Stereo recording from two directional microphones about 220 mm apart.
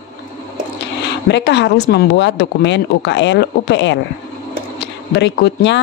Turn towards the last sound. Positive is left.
turn(degrees=50)  # may be behind; listen again after turning